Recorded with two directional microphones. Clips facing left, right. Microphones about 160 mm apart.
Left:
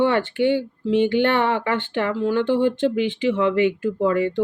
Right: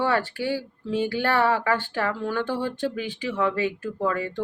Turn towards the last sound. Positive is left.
turn(degrees=20)  # may be behind; listen again after turning